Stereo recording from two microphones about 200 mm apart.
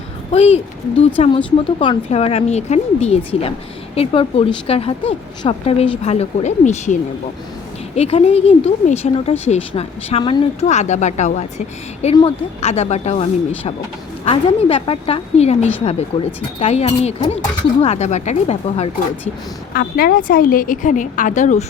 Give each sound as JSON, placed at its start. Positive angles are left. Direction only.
{"t": 0.3, "sound": "a woman's voice", "side_deg": 30}
{"t": 7.9, "sound": "a woman's voice", "side_deg": 30}
{"t": 14.3, "sound": "a woman's voice", "side_deg": 30}
{"t": 19.7, "sound": "a woman's voice", "side_deg": 45}